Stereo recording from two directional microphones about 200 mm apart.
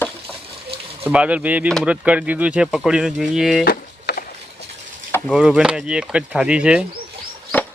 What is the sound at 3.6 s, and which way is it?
Wood, 50° left (ahead or behind).